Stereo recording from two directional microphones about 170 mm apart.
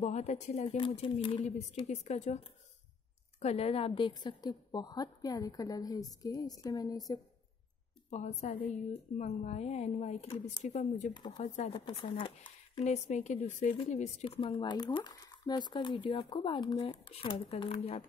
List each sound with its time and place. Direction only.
0.0 s speech: 45° left (ahead or behind)
0.7 s a woman's voice: 30° left (ahead or behind)
8.1 s a woman's voice: 40° left (ahead or behind)
11.1 s a woman's voice: 25° left (ahead or behind)
11.4 s a woman's voice: 40° left (ahead or behind)
11.8 s speech: 30° left (ahead or behind)
12.8 s a woman's voice: 40° left (ahead or behind)